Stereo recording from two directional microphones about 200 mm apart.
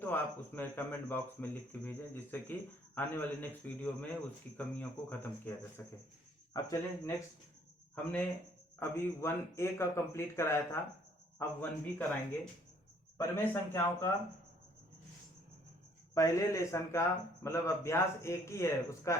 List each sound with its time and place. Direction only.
0.0 s speech: 10° left (ahead or behind)
8.8 s speech: 15° left (ahead or behind)
13.1 s speech: 15° left (ahead or behind)
16.1 s speech: 15° left (ahead or behind)